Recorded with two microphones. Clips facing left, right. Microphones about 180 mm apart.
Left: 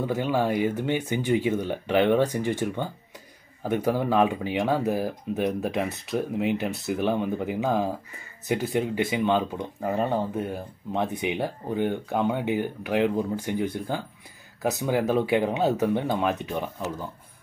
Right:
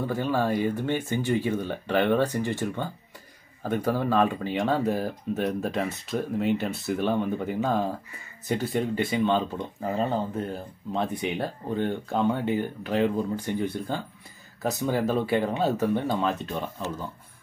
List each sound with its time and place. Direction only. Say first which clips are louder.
0.0 s speech: left 1 dB; 15° left (ahead or behind)